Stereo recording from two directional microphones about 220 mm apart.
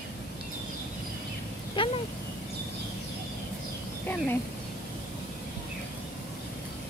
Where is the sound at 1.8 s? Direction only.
20° left (ahead or behind).